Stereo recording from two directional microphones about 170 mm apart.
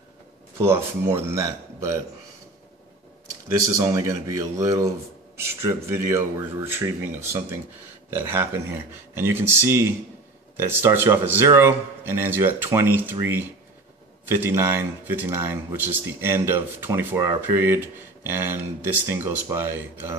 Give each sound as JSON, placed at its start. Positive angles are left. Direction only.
{"t": 0.6, "sound": "speech", "side_deg": -15}
{"t": 3.5, "sound": "speech", "side_deg": -20}
{"t": 8.1, "sound": "speech", "side_deg": -15}